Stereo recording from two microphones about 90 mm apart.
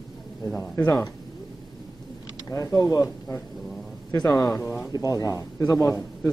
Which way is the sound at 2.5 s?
35° left (ahead or behind).